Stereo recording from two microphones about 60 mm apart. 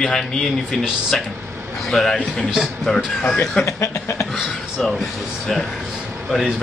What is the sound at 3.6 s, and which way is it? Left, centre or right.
Speech, left.